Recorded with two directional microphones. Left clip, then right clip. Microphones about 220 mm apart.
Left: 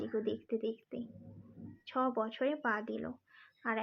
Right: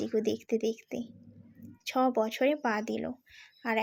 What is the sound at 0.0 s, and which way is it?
Speech, 30° right (ahead or behind).